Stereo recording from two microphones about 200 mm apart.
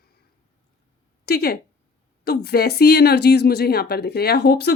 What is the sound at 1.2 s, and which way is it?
Speech, 50° left (ahead or behind).